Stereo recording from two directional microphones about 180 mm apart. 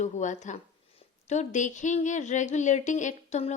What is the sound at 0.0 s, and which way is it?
A woman's voice, 40° left (ahead or behind).